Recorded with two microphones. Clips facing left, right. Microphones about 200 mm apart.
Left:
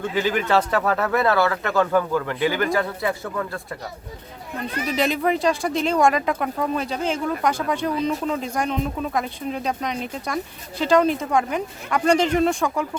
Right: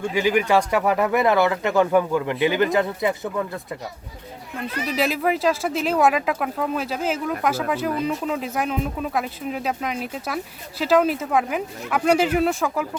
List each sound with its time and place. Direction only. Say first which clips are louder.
0.1 s speech: right 2 dB; 15° right (ahead or behind)
4.6 s speech: left 1 dB; centre (ahead or behind)